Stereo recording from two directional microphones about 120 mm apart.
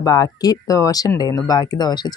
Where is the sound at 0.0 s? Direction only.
30° left (ahead or behind).